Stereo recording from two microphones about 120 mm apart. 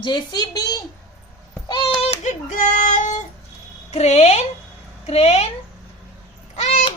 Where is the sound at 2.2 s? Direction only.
90° left.